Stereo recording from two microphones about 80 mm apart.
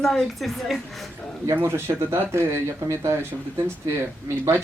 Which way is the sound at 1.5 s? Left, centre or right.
Right.